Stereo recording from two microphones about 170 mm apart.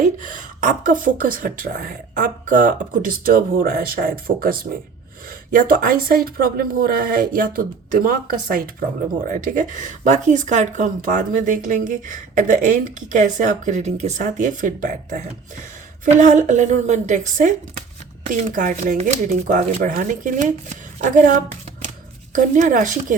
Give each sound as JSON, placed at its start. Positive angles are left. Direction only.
{"t": 0.2, "sound": "speech", "side_deg": -50}